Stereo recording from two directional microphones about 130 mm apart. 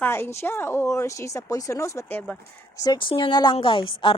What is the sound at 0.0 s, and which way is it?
Speech, 20° left (ahead or behind).